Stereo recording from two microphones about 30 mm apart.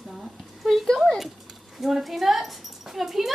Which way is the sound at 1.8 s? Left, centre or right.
Centre.